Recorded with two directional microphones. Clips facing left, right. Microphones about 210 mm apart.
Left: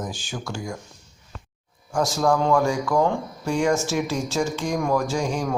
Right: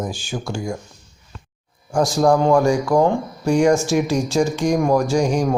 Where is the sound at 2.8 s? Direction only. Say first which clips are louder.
Right 5 dB; 30° right (ahead or behind).